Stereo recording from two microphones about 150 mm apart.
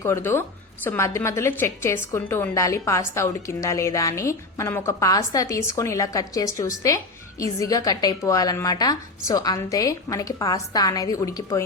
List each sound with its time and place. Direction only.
0.0 s a woman's voice: 15° left (ahead or behind)